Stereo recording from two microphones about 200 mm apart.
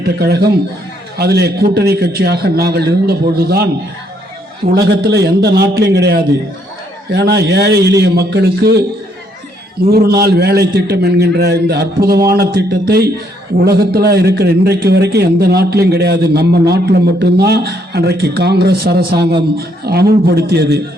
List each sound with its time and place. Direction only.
0.0 s a man's voice: 50° right (ahead or behind)
4.7 s a man's voice: 55° right (ahead or behind)
9.9 s a man's voice: 50° right (ahead or behind)